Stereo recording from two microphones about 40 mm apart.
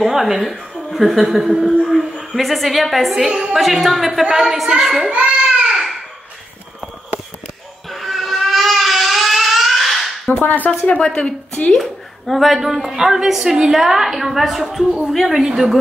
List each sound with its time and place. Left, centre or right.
0.1 s a woman's voice: centre
5.2 s a sound: centre
7.9 s vehicle: centre
10.3 s speech: left
11.1 s a woman's voice: left
11.7 s a woman's voice: centre